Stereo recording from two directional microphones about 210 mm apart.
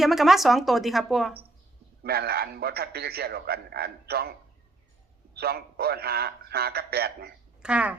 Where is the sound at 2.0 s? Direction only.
50° right (ahead or behind).